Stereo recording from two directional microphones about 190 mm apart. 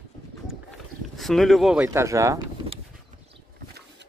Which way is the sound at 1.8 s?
15° right (ahead or behind).